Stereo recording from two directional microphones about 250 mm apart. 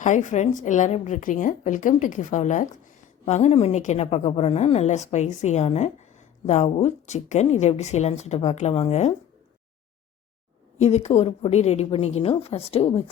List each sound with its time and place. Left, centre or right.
0.0 s a woman's voice: left
10.8 s a woman's voice: left